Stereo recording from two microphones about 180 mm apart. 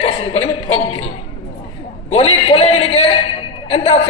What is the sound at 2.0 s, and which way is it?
A man's voice, 30° left (ahead or behind).